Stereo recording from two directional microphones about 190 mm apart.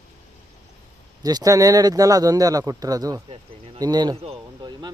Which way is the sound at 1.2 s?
20° right (ahead or behind).